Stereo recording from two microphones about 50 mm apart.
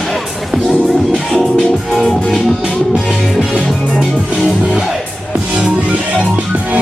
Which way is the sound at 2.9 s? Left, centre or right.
Centre.